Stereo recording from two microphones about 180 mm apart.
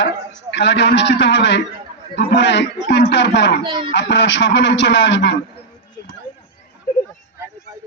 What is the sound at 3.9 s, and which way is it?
A man's voice, 80° left.